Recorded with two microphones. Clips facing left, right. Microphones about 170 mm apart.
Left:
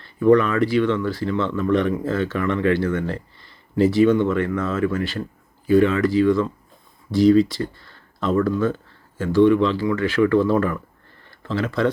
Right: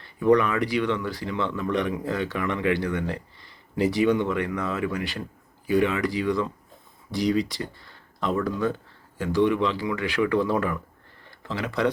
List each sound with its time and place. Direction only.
0.2 s speech: 15° right (ahead or behind)